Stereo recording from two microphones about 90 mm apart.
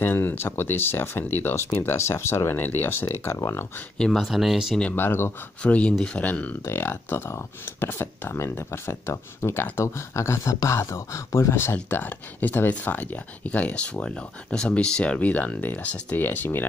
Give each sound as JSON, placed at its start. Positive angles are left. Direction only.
{"t": 0.0, "sound": "speech", "side_deg": 20}
{"t": 4.0, "sound": "speech", "side_deg": 0}
{"t": 4.9, "sound": "speech", "side_deg": 25}
{"t": 5.6, "sound": "speech", "side_deg": 15}
{"t": 6.6, "sound": "speech", "side_deg": 25}